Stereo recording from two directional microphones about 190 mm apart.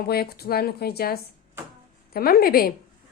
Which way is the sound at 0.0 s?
55° left (ahead or behind).